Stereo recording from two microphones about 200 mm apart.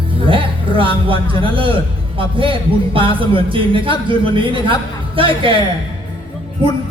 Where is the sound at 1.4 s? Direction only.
25° right (ahead or behind).